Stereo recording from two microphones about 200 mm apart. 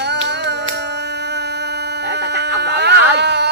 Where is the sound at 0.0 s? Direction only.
55° right (ahead or behind).